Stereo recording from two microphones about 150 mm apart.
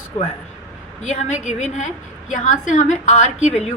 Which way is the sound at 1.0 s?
50° left (ahead or behind).